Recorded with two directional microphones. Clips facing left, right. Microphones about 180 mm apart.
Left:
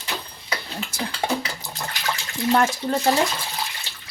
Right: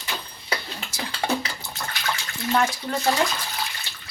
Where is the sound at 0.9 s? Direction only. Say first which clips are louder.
Left 4 dB; 55° left (ahead or behind).